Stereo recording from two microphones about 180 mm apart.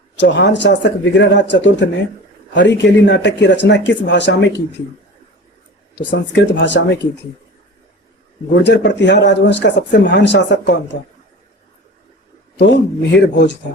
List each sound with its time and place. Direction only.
0.2 s speech: 80° left
6.0 s speech: 80° left
8.6 s speech: 75° left (ahead or behind)
12.5 s speech: 75° left (ahead or behind)